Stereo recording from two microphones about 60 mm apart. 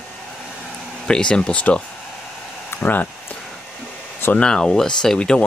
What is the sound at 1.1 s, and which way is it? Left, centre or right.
Speech, centre.